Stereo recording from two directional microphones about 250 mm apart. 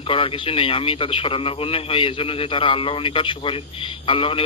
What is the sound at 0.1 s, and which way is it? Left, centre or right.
A man's voice, left.